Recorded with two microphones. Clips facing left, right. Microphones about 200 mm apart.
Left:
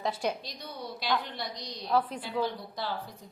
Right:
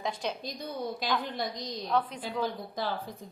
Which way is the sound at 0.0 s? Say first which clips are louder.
Left 2 dB; 10° left (ahead or behind).